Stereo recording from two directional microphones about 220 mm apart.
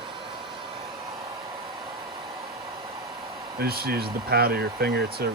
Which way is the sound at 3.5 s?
45° right (ahead or behind).